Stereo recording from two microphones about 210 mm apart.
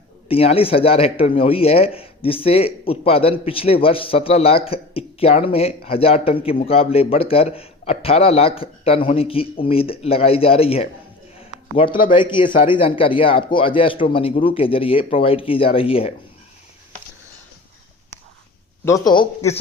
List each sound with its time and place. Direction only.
0.3 s speech: 25° left (ahead or behind)
19.0 s speech: 20° left (ahead or behind)